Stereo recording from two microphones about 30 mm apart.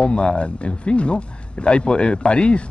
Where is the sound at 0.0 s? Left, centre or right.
Left.